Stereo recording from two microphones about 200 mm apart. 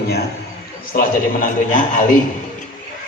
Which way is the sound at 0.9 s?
40° left (ahead or behind).